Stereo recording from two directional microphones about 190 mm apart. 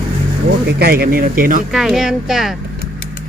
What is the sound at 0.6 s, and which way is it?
Speech, 55° right (ahead or behind).